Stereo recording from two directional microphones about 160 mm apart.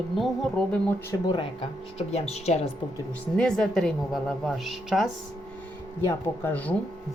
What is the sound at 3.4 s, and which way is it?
A woman's voice, 5° left (ahead or behind).